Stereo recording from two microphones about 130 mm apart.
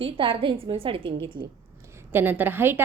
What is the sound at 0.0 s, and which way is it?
A woman's voice, 40° right (ahead or behind).